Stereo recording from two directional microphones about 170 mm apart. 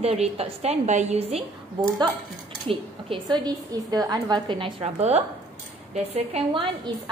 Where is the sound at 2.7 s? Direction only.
30° right (ahead or behind).